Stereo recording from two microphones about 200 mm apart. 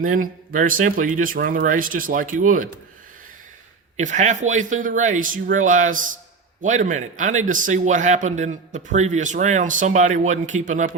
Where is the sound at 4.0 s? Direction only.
40° right (ahead or behind).